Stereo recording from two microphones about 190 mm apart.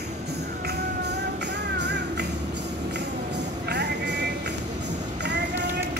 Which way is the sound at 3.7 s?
60° right (ahead or behind).